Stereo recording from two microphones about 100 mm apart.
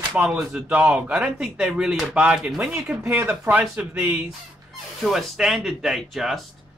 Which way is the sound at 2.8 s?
20° right (ahead or behind).